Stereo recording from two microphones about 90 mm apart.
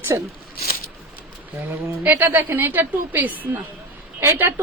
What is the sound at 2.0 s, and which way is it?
Speech, 25° right (ahead or behind).